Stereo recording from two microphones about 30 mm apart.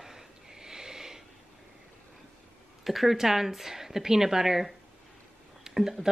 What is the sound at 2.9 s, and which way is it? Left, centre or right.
Speech, centre.